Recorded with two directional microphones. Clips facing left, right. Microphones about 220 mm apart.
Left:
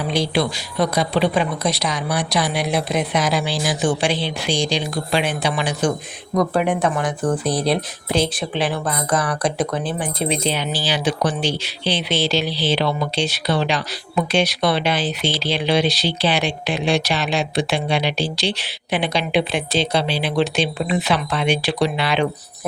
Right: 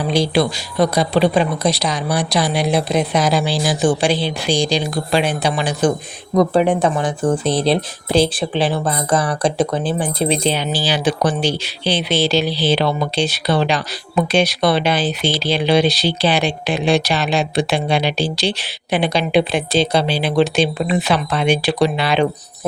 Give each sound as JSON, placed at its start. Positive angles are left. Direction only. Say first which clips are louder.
{"t": 0.1, "sound": "speech", "louder": "right 4 dB", "side_deg": -35}
{"t": 6.3, "sound": "speech", "louder": "right 4 dB", "side_deg": -25}